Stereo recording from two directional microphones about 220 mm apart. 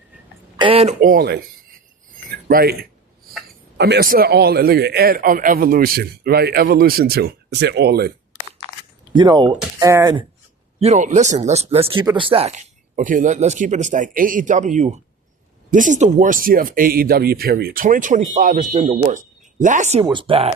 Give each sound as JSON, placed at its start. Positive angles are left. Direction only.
{"t": 0.5, "sound": "speech", "side_deg": -25}
{"t": 2.5, "sound": "a man's voice", "side_deg": -45}
{"t": 3.8, "sound": "a man's voice", "side_deg": -50}
{"t": 9.1, "sound": "speech", "side_deg": -20}
{"t": 10.8, "sound": "speech", "side_deg": -30}